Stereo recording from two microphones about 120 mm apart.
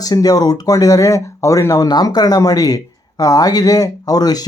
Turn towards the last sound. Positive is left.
turn(degrees=35)  # may be behind; listen again after turning